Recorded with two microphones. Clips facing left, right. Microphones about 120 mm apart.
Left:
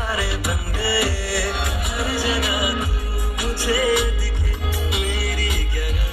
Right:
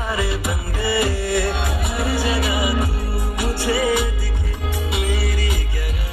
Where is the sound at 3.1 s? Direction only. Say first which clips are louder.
Right 2 dB; 55° right (ahead or behind).